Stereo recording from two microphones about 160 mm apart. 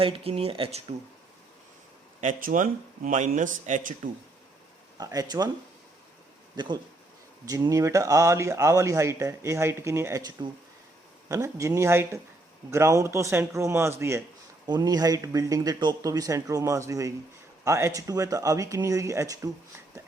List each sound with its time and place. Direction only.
0.0 s speech: 35° right (ahead or behind)
2.2 s speech: 55° right (ahead or behind)
4.9 s speech: 20° right (ahead or behind)
7.4 s speech: 20° right (ahead or behind)